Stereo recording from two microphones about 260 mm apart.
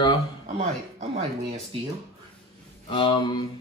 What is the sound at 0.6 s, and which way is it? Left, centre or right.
Speech, right.